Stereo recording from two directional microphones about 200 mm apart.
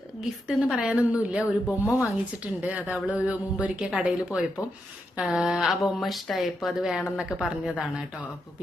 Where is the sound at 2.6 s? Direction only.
5° right (ahead or behind).